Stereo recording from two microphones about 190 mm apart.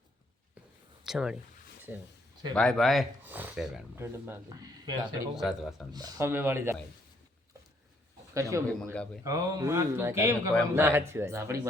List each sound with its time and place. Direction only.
1.0 s speech: 5° right (ahead or behind)
2.6 s speech: centre (ahead or behind); by 5.3 s 20° right (ahead or behind)
5.3 s speech: centre (ahead or behind)
5.9 s speech: 20° right (ahead or behind)
8.3 s speech: 15° right (ahead or behind)